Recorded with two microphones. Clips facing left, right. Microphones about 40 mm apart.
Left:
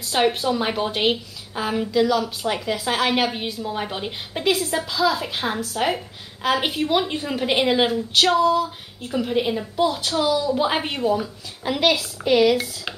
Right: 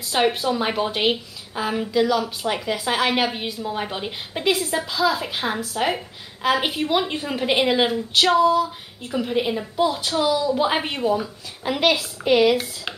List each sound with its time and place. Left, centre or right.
0.1 s a woman's voice: centre